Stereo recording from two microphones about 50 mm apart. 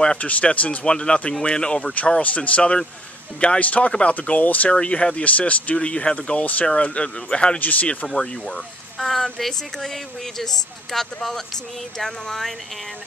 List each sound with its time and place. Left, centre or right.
0.2 s speech: left
4.7 s speech: left
8.1 s speech: centre